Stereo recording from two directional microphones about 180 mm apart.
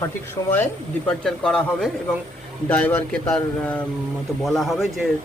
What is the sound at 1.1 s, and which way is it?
A man's voice, 5° left (ahead or behind).